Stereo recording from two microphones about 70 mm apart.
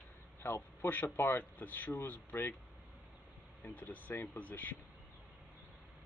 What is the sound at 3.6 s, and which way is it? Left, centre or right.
Speech, left.